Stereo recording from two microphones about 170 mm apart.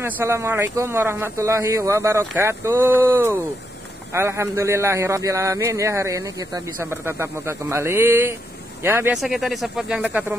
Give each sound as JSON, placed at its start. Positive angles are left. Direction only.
{"t": 0.0, "sound": "a man's voice", "side_deg": -15}
{"t": 9.2, "sound": "speech", "side_deg": 0}